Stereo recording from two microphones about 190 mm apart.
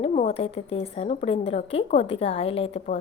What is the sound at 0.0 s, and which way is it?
A woman's voice, 35° left (ahead or behind).